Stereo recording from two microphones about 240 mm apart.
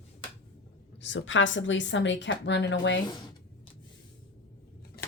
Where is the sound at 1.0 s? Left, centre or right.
Left.